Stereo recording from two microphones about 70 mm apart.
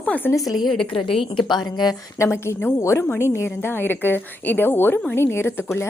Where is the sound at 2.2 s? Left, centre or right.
Left.